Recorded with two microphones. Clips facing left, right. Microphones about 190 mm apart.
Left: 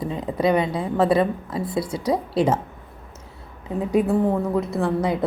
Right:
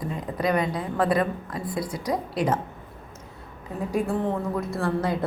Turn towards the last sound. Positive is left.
turn(degrees=20)  # may be behind; listen again after turning